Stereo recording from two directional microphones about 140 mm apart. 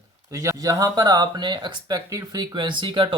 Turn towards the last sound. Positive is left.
turn(degrees=-35)  # may be behind; listen again after turning